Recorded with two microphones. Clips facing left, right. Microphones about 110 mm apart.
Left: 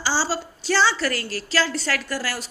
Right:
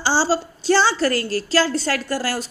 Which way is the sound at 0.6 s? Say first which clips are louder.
Right 3 dB; 40° right (ahead or behind).